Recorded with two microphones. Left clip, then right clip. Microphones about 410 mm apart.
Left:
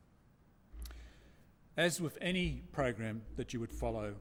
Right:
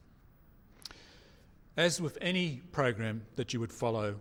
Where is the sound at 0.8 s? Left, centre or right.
Right.